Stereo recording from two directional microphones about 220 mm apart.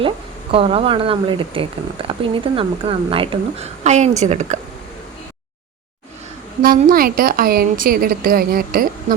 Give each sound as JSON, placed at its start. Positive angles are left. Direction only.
{"t": 0.5, "sound": "speech", "side_deg": -25}
{"t": 6.6, "sound": "a woman's voice", "side_deg": -40}